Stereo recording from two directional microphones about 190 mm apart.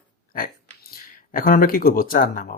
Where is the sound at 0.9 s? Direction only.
50° left (ahead or behind).